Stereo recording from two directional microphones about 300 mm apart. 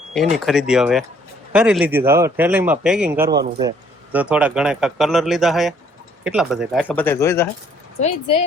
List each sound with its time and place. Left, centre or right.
0.1 s speech: centre
7.9 s speech: left